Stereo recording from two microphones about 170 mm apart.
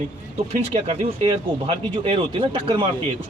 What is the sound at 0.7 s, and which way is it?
Speech, 35° right (ahead or behind).